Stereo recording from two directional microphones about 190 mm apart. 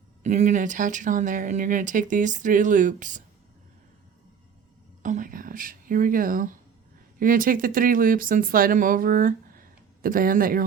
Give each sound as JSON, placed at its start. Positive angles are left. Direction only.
{"t": 0.2, "sound": "speech", "side_deg": -40}
{"t": 5.0, "sound": "a sound", "side_deg": -45}
{"t": 7.2, "sound": "speech", "side_deg": -45}